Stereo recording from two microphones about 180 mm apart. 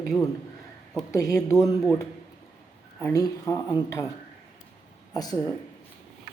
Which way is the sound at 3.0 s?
15° left (ahead or behind).